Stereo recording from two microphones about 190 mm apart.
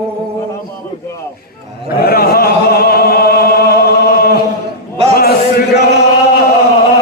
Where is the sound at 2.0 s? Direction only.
55° left (ahead or behind).